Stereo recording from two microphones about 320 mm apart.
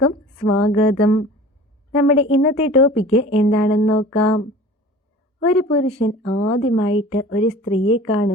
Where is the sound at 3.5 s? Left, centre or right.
Left.